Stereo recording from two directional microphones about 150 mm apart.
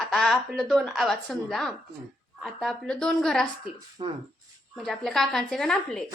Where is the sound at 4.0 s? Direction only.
35° right (ahead or behind).